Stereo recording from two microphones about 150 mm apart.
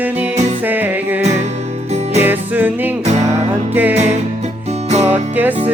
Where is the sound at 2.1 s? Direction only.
15° right (ahead or behind).